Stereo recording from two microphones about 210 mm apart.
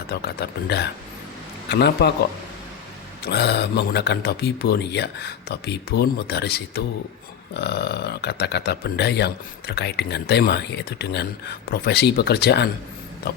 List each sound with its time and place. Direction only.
0.1 s speech: 50° left (ahead or behind)
3.2 s speech: 50° left (ahead or behind)